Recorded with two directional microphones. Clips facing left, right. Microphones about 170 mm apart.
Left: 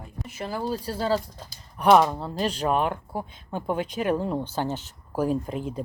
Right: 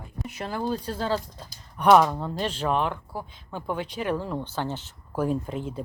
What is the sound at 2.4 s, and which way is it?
Speech, 40° left (ahead or behind).